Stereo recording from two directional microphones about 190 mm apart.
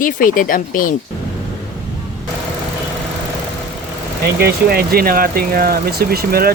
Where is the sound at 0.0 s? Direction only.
45° left (ahead or behind).